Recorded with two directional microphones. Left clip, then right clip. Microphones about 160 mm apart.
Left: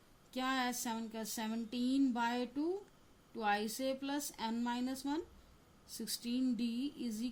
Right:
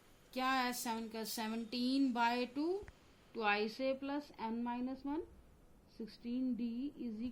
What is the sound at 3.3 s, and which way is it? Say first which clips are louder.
A woman's voice: even; 90° left.